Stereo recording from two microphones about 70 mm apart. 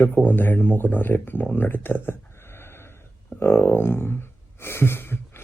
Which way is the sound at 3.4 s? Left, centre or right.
Left.